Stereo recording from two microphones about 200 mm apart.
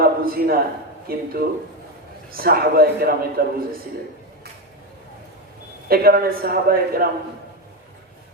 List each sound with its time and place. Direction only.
0.0 s a sound: 45° right (ahead or behind)
1.0 s a man's voice: 50° right (ahead or behind)
5.9 s a man's voice: 50° right (ahead or behind)